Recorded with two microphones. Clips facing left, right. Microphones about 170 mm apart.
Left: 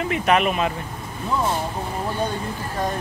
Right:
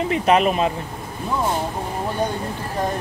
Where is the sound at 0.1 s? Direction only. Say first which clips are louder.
Right 2 dB; 30° right (ahead or behind).